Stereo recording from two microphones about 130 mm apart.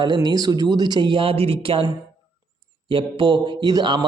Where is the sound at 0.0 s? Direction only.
35° right (ahead or behind).